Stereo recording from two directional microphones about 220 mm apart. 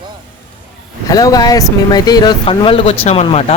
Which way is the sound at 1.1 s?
15° left (ahead or behind).